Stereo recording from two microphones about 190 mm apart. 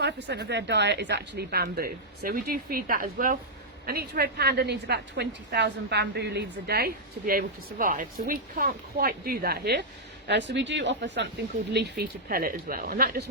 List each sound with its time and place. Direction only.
0.0 s a woman's voice: 65° right (ahead or behind)
10.2 s speech: 65° right (ahead or behind)
11.7 s speech: 60° right (ahead or behind)